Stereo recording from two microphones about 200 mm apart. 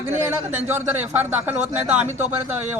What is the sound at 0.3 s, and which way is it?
Speech, 10° right (ahead or behind).